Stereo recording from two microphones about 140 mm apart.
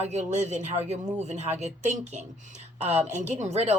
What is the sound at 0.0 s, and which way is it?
Speech, 50° right (ahead or behind).